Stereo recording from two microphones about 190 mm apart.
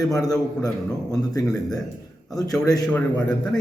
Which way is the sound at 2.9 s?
5° left (ahead or behind).